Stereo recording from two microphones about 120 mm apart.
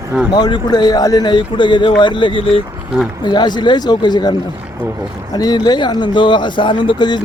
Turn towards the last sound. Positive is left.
turn(degrees=40)  # may be behind; listen again after turning